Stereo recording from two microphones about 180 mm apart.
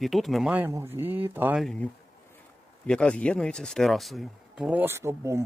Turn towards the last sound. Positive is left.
turn(degrees=-15)  # may be behind; listen again after turning